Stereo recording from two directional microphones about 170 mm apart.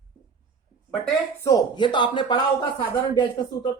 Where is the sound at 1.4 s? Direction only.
25° left (ahead or behind).